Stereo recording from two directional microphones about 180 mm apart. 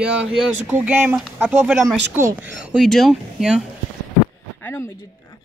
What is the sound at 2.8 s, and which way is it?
Speech, centre (ahead or behind).